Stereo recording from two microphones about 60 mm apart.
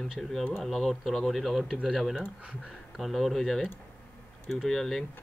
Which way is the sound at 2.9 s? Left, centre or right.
Centre.